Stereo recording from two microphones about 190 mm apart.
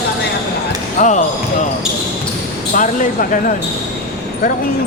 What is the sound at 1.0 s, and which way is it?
Speech, 40° left (ahead or behind).